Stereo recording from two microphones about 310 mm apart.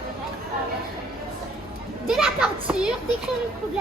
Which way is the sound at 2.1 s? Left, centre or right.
Centre.